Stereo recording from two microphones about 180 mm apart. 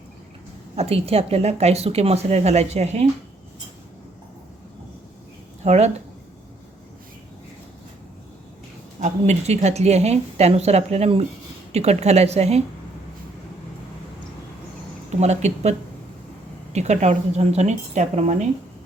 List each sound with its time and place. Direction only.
0.8 s speech: 35° right (ahead or behind)
5.6 s speech: 40° right (ahead or behind)
9.0 s speech: 40° right (ahead or behind)
15.2 s speech: 40° right (ahead or behind)
16.7 s speech: 40° right (ahead or behind)